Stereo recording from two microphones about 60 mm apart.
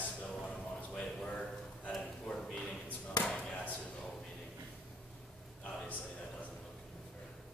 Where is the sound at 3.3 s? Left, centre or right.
Centre.